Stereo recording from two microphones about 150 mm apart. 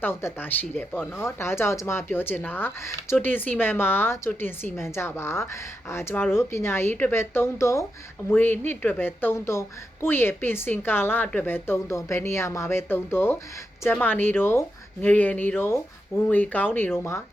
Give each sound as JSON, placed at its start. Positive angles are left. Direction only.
{"t": 0.0, "sound": "speech", "side_deg": 15}